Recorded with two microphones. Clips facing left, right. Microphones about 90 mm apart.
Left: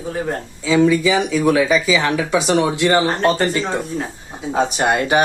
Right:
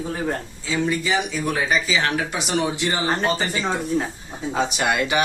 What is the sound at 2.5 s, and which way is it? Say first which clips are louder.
Speech: left 7 dB; 90° left.